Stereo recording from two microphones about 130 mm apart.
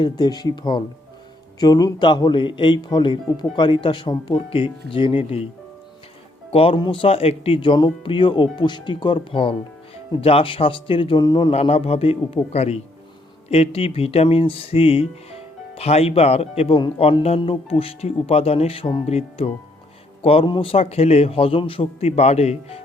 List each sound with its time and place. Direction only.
0.0 s speech: 35° left (ahead or behind)
6.5 s speech: 45° left (ahead or behind)
11.6 s speech: 50° left (ahead or behind)